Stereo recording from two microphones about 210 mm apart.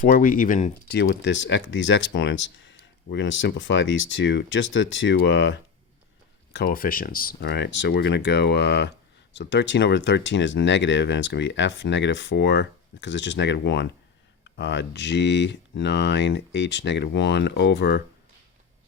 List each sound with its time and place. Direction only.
0.0 s speech: 40° left (ahead or behind); by 5.5 s 60° left (ahead or behind)
6.5 s speech: 50° left (ahead or behind)